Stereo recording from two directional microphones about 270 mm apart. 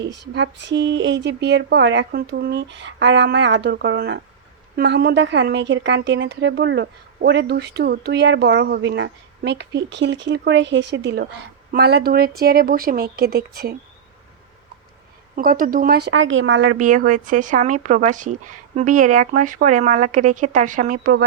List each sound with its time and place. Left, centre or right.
0.0 s speech: right
15.4 s a woman's voice: right